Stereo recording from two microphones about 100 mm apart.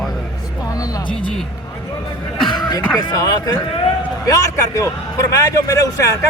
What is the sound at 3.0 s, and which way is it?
Speech, 40° left (ahead or behind).